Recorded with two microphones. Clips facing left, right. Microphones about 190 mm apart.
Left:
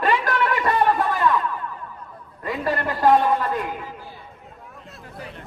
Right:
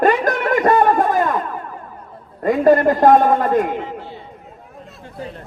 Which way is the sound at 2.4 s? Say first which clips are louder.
Right 12 dB; 45° right (ahead or behind).